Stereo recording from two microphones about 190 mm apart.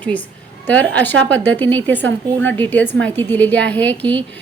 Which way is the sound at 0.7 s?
10° left (ahead or behind).